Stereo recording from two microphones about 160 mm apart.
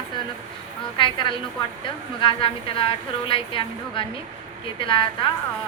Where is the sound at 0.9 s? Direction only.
30° left (ahead or behind).